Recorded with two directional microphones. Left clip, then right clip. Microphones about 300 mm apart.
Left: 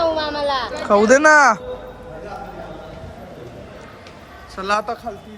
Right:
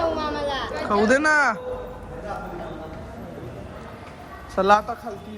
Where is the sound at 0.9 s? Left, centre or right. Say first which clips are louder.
Left 7 dB; centre.